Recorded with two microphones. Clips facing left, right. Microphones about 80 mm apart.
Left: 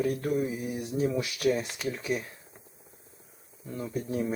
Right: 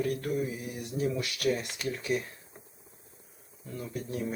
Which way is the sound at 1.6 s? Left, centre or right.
Centre.